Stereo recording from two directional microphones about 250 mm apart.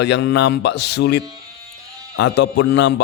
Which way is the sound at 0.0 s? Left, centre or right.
Left.